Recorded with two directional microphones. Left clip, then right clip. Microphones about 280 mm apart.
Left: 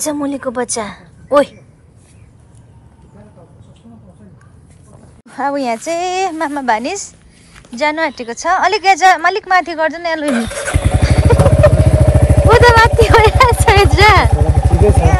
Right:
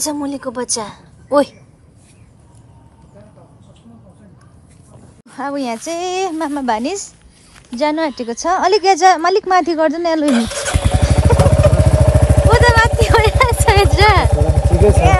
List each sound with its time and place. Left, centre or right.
0.0 s a woman's voice: centre
5.3 s a woman's voice: centre
10.2 s a sound: centre
11.0 s vehicle: centre